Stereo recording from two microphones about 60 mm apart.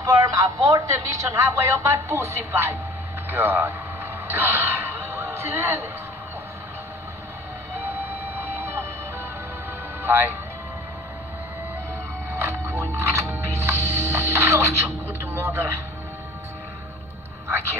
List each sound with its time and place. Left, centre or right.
0.0 s a man's voice: right
0.9 s a woman's voice: right
3.3 s a sound: right
10.0 s speech: right
12.4 s music: right
13.2 s music: right
15.3 s a man's voice: right